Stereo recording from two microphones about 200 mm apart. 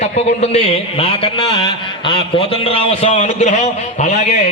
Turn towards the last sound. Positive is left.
turn(degrees=35)  # may be behind; listen again after turning